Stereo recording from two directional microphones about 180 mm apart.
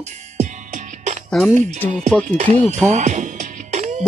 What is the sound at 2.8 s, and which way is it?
Music, 40° right (ahead or behind).